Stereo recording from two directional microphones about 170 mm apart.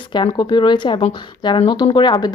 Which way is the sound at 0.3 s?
25° left (ahead or behind).